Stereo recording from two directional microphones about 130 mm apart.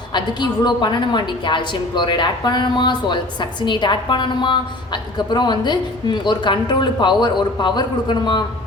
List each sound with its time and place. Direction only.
0.1 s a woman's voice: 35° left (ahead or behind)